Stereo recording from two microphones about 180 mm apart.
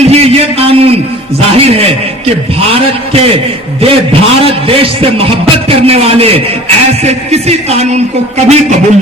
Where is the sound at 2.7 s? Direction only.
35° right (ahead or behind).